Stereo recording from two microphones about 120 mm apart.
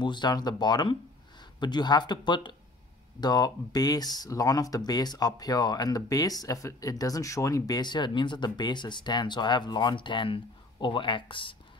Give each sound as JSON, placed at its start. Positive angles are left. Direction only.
{"t": 0.0, "sound": "speech", "side_deg": 40}